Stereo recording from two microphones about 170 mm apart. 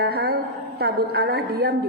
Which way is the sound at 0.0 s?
65° right (ahead or behind).